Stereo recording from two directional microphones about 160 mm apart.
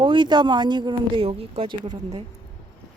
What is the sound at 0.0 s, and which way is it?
Speech, 30° right (ahead or behind).